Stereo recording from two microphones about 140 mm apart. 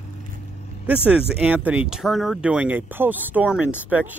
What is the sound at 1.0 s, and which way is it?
Speech, 5° right (ahead or behind).